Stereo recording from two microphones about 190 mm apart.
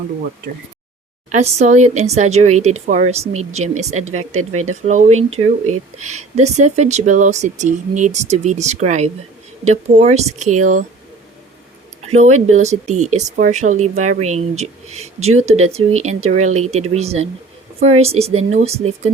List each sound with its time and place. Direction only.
1.3 s speech: 35° right (ahead or behind)
12.0 s speech: 35° right (ahead or behind)